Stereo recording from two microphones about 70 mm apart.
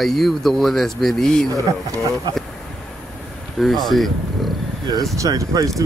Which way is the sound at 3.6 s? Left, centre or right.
Centre.